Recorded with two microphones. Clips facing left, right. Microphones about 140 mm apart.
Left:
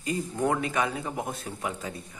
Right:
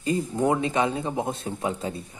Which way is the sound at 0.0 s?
25° right (ahead or behind).